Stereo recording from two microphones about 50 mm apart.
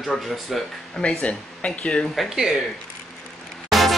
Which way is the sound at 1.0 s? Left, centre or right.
Left.